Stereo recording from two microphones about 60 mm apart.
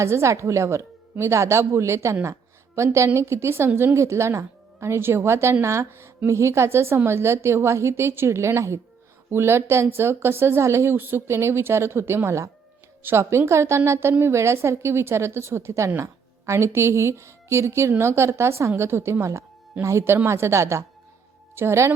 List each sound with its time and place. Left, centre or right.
0.0 s a woman's voice: right
13.0 s a woman's voice: right